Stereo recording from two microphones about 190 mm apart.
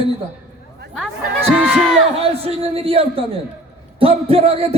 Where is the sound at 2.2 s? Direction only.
30° right (ahead or behind).